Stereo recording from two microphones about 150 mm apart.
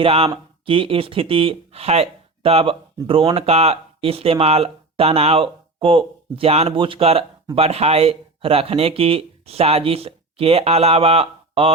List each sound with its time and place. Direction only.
0.0 s speech: 40° right (ahead or behind)